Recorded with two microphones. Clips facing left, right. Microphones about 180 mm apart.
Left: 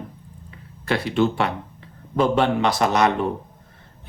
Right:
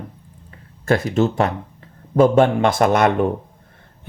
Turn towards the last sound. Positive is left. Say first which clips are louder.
# right 4 dB
turn(degrees=-50)  # may be behind; listen again after turning